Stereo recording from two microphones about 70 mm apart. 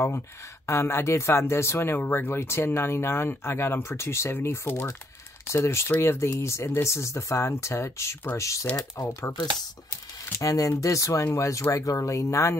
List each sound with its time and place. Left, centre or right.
0.7 s speech: left
10.3 s speech: left